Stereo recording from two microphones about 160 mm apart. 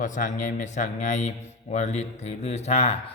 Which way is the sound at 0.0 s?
50° left (ahead or behind).